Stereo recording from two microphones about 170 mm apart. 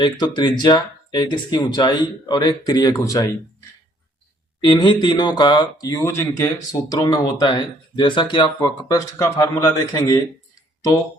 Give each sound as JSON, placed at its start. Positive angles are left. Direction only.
{"t": 0.0, "sound": "speech", "side_deg": 25}
{"t": 4.6, "sound": "speech", "side_deg": 25}